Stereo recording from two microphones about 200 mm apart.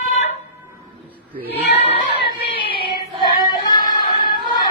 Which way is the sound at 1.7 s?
30° left (ahead or behind).